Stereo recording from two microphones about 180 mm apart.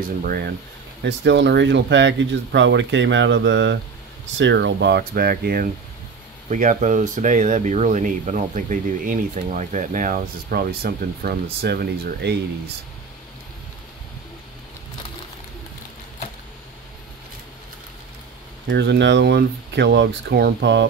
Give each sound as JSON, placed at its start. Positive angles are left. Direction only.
{"t": 0.2, "sound": "speech", "side_deg": -60}
{"t": 1.0, "sound": "speech", "side_deg": -80}
{"t": 6.5, "sound": "speech", "side_deg": -45}
{"t": 18.7, "sound": "speech", "side_deg": -80}